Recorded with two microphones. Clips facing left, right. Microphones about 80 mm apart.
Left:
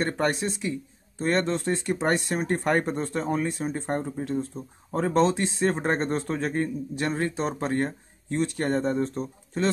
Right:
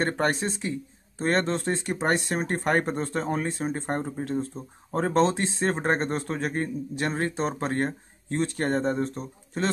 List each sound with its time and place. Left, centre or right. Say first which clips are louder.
0.0 s speech: even; right
4.2 s speech: even; right
4.9 s speech: even; right